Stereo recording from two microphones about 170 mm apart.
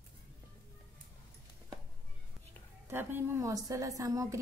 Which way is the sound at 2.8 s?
15° right (ahead or behind).